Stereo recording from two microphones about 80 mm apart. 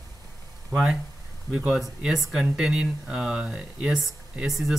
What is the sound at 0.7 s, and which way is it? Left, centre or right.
Speech, centre.